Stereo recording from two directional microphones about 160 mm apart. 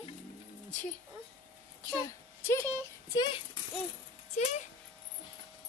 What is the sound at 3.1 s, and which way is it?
Speech, 30° left (ahead or behind).